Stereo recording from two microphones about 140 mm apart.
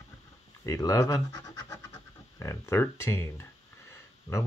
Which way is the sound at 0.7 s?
25° left (ahead or behind).